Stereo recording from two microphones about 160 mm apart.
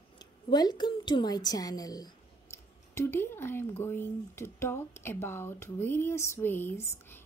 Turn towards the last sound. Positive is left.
turn(degrees=15)  # may be behind; listen again after turning